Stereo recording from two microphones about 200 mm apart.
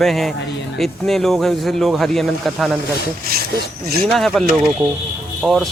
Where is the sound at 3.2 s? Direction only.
50° right (ahead or behind).